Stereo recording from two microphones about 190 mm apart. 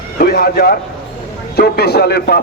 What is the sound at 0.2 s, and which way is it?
A man's voice, 50° left (ahead or behind).